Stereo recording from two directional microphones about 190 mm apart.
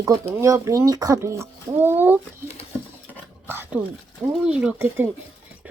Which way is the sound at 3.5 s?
10° right (ahead or behind).